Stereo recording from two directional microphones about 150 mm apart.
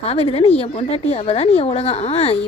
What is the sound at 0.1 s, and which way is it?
A woman's voice, 40° left (ahead or behind).